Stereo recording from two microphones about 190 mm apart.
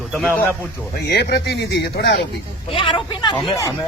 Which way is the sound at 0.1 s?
10° left (ahead or behind).